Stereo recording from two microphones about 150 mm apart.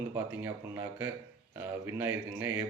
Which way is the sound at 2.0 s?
15° right (ahead or behind).